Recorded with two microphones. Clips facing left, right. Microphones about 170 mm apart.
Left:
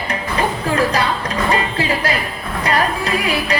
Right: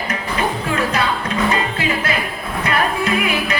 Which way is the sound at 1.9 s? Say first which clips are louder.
Left 1 dB; 35° left (ahead or behind).